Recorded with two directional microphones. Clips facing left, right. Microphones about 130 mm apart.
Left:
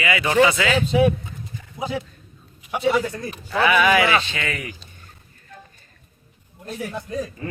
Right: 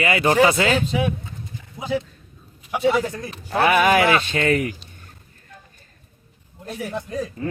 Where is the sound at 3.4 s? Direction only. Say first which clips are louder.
Right 1 dB; 50° right (ahead or behind).